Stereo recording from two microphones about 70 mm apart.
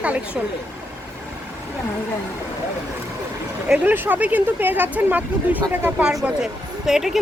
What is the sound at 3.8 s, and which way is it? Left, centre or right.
Speech, right.